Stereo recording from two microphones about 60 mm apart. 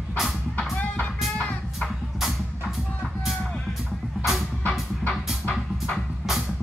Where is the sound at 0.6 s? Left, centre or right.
Left.